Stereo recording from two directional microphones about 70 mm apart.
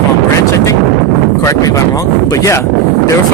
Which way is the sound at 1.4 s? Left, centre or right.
Left.